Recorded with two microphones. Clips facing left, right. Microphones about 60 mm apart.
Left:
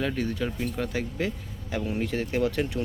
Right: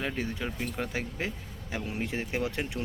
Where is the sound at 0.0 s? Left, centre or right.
Right.